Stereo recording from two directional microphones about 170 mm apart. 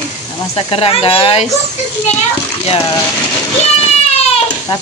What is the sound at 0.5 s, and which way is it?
Speech, 35° left (ahead or behind).